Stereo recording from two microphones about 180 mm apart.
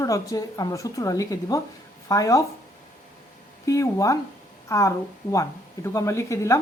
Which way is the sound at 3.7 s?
20° left (ahead or behind).